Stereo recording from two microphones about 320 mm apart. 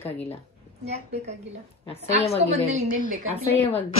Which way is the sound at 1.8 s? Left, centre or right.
Centre.